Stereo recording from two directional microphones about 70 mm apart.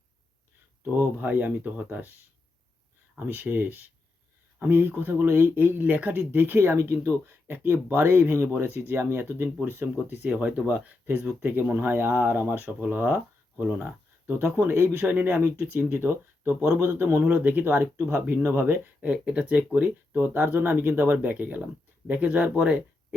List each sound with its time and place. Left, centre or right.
0.9 s speech: right
3.2 s speech: right
14.4 s speech: right
15.0 s speech: right
19.0 s speech: centre